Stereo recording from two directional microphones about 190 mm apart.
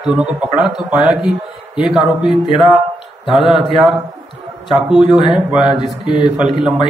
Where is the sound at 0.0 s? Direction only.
5° right (ahead or behind).